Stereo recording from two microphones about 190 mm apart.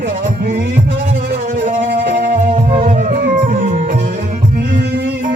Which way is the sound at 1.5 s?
45° right (ahead or behind).